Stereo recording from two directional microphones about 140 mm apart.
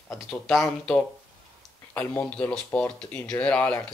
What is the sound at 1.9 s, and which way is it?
Speech, 15° left (ahead or behind).